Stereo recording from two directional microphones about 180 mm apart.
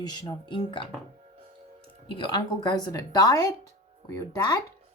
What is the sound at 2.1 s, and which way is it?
Speech, 25° left (ahead or behind).